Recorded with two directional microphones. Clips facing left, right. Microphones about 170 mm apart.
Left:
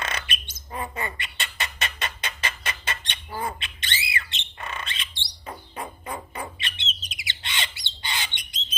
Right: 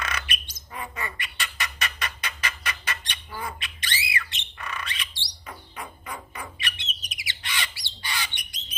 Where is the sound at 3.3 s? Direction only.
30° left (ahead or behind).